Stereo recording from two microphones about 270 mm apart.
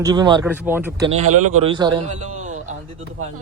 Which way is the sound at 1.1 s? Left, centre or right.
Right.